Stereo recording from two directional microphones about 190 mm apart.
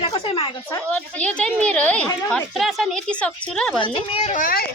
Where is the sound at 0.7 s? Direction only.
5° left (ahead or behind).